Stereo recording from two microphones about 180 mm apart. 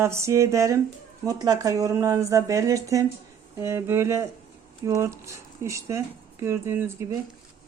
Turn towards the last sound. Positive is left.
turn(degrees=-15)  # may be behind; listen again after turning